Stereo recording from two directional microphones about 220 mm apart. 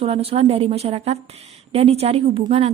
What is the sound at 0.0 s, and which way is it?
A woman's voice, 25° right (ahead or behind).